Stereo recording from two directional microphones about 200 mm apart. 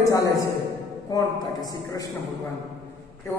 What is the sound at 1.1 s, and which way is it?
A man's voice, 20° left (ahead or behind).